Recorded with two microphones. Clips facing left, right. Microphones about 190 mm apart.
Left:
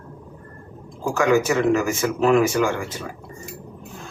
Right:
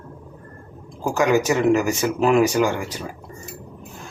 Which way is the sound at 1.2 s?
20° right (ahead or behind).